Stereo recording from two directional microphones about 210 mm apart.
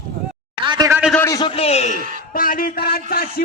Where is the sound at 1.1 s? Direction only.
15° left (ahead or behind).